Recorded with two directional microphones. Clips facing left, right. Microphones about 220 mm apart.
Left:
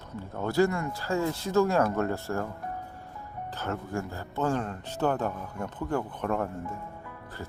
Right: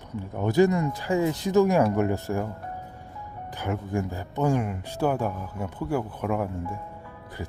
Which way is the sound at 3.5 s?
15° right (ahead or behind).